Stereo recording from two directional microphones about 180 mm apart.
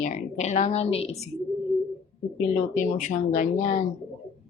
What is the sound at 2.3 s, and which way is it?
A woman's voice, 40° left (ahead or behind).